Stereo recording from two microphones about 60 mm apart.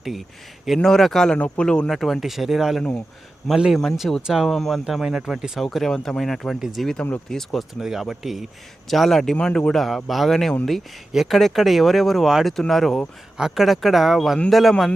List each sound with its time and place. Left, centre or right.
0.8 s speech: centre
1.9 s speech: centre
4.9 s speech: centre
7.8 s speech: centre
9.7 s speech: centre
13.3 s speech: centre